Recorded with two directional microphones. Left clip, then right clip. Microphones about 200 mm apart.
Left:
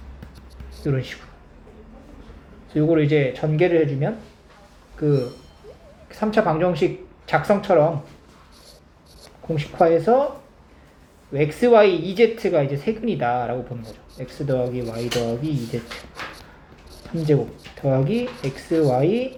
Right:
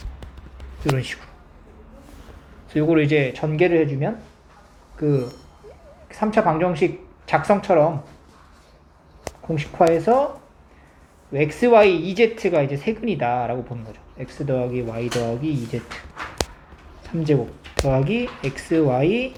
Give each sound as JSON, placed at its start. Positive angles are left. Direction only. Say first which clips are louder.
{"t": 0.9, "sound": "speech", "louder": "right 1 dB", "side_deg": -35}
{"t": 2.7, "sound": "speech", "louder": "even", "side_deg": -30}
{"t": 9.6, "sound": "speech", "louder": "even", "side_deg": -30}
{"t": 11.3, "sound": "speech", "louder": "even", "side_deg": -30}
{"t": 17.8, "sound": "speech", "louder": "left 1 dB", "side_deg": -30}